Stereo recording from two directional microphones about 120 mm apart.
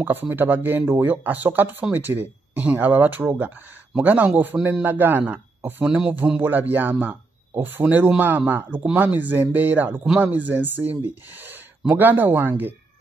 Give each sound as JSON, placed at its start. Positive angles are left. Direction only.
{"t": 0.0, "sound": "speech", "side_deg": -15}